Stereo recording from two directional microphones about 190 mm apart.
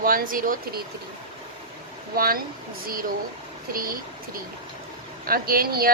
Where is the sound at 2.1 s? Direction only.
50° right (ahead or behind).